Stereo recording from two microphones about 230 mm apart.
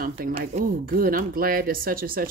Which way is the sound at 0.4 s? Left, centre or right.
Right.